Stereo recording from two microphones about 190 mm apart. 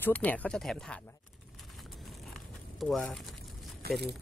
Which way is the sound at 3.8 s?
55° right (ahead or behind).